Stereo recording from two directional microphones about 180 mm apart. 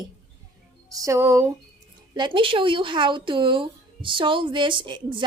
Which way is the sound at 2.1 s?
25° right (ahead or behind).